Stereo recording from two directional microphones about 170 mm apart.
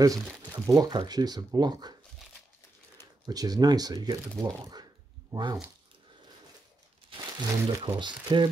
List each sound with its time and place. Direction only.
0.5 s speech: 20° right (ahead or behind)
3.3 s speech: 20° right (ahead or behind)
7.1 s speech: 30° right (ahead or behind)